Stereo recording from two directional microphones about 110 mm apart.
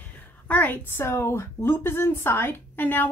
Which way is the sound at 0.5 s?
15° left (ahead or behind).